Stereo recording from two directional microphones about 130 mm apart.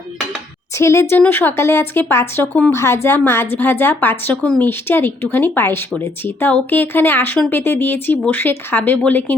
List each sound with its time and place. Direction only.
0.8 s speech: 20° left (ahead or behind)